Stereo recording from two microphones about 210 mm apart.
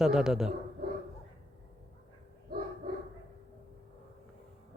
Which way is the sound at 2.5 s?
45° right (ahead or behind).